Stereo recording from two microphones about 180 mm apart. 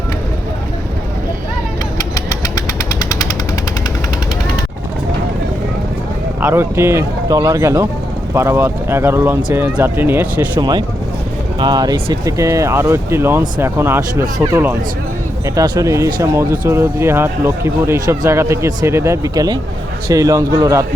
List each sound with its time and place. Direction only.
2.0 s vehicle: 20° left (ahead or behind)
3.0 s jackhammer: 20° left (ahead or behind)
6.4 s speech: 15° right (ahead or behind)
10.6 s a man's voice: 20° right (ahead or behind)